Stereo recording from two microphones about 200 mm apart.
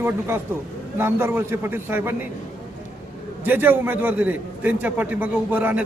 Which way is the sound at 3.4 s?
10° right (ahead or behind).